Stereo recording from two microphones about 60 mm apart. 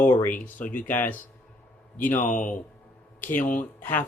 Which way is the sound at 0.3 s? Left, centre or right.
Left.